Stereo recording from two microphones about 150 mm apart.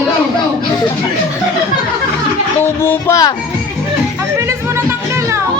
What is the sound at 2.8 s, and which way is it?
Music, 15° left (ahead or behind).